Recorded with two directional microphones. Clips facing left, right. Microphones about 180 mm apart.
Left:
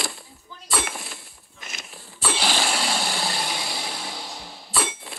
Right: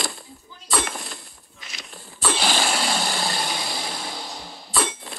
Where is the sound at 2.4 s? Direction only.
50° right (ahead or behind).